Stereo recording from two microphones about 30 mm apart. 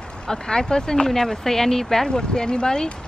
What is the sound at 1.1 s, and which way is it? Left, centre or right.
Speech, centre.